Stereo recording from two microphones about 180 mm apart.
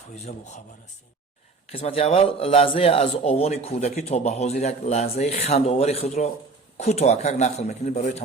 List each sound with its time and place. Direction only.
0.2 s speech: 40° left (ahead or behind)
1.7 s speech: 35° left (ahead or behind)